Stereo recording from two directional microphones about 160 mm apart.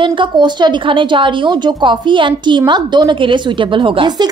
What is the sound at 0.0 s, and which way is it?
A woman's voice, 30° right (ahead or behind).